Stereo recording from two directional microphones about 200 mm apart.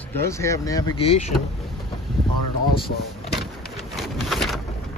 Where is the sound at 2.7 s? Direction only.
50° left (ahead or behind).